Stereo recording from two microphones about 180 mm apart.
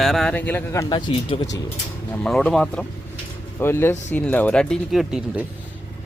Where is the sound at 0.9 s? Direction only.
25° left (ahead or behind).